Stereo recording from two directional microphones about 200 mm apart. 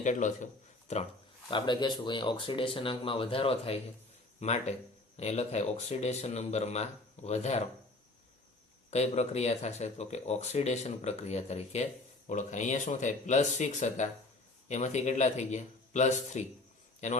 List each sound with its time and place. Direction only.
0.0 s speech: 40° left (ahead or behind)
1.5 s speech: 25° left (ahead or behind)
8.9 s speech: 35° left (ahead or behind)